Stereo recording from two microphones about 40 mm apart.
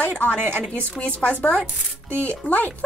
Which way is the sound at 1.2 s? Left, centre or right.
Left.